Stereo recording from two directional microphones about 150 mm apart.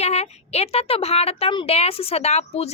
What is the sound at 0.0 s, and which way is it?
A woman's voice, 45° left (ahead or behind).